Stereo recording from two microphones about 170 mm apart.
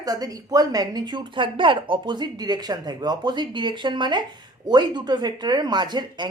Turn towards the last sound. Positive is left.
turn(degrees=-25)  # may be behind; listen again after turning